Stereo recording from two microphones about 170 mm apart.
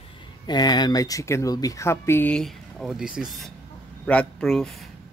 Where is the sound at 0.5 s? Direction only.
25° left (ahead or behind); by 4.8 s centre (ahead or behind).